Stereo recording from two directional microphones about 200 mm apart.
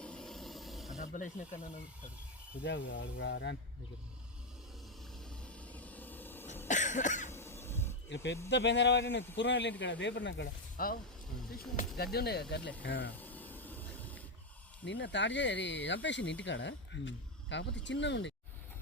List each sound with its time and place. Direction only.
0.0 s a sound: 5° left (ahead or behind)
0.9 s speech: 40° left (ahead or behind)
2.6 s speech: 65° left (ahead or behind)
5.5 s a sound: 5° left (ahead or behind)
6.7 s cough: 35° left (ahead or behind)
7.3 s cough: 10° left (ahead or behind)
8.1 s speech: 60° left (ahead or behind)
10.4 s speech: 45° left (ahead or behind)
11.9 s speech: 55° left (ahead or behind)
13.1 s a sound: 10° left (ahead or behind)
14.8 s speech: 65° left (ahead or behind)